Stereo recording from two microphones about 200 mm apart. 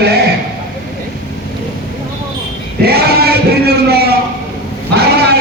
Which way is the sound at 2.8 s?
50° right (ahead or behind).